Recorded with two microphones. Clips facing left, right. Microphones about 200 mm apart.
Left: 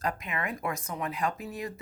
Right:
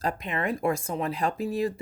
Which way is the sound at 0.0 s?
30° right (ahead or behind).